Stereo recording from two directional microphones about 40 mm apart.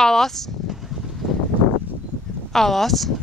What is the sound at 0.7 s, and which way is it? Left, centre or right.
Vehicle, centre.